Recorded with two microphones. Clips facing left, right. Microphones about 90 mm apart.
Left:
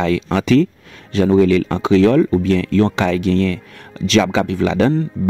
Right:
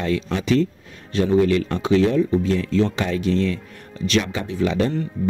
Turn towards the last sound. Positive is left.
turn(degrees=90)